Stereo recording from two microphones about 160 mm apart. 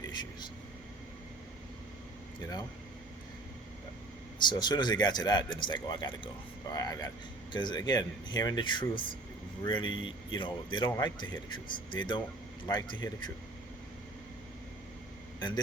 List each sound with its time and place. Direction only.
0.1 s a sound: 25° left (ahead or behind)
4.4 s speech: 25° left (ahead or behind)
15.4 s a man's voice: 30° left (ahead or behind)